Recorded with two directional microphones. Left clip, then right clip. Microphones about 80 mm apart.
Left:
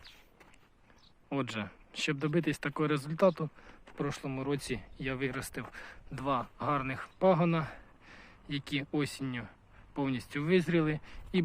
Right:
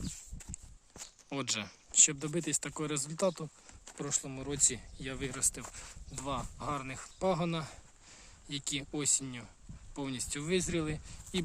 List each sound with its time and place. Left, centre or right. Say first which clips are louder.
1.3 s speech: left 1 dB; right; by 7.1 s centre
7.2 s speech: left 5 dB; right